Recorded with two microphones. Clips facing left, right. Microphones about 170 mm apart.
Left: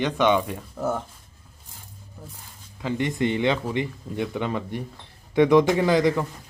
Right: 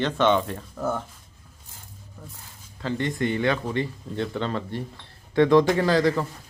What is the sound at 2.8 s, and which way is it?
Speech, 15° left (ahead or behind).